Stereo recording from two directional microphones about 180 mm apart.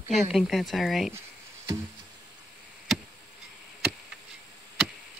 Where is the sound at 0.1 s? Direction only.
Centre (ahead or behind).